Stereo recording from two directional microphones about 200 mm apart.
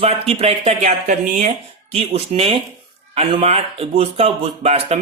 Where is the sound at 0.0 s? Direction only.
30° right (ahead or behind).